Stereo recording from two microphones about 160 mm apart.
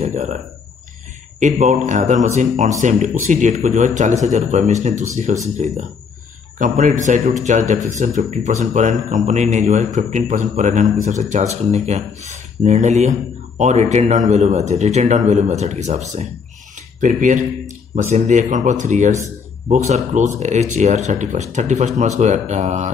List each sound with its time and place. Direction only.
0.0 s speech: 45° right (ahead or behind)
1.4 s speech: 45° right (ahead or behind)